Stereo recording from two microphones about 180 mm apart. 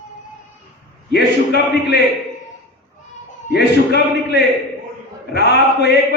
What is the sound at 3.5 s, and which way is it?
A man's voice, 65° left (ahead or behind).